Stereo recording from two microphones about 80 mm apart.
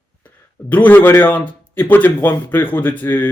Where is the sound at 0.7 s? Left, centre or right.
Left.